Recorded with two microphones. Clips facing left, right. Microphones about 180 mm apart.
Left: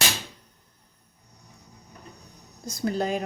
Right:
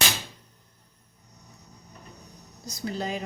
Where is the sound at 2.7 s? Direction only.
50° left (ahead or behind).